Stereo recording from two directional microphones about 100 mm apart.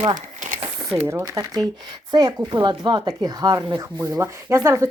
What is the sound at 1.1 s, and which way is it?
Speech, 30° right (ahead or behind).